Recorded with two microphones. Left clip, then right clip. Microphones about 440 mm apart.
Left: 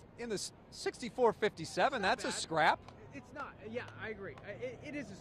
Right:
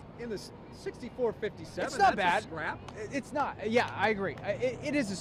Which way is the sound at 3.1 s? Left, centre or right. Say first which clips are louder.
Right 14 dB; right.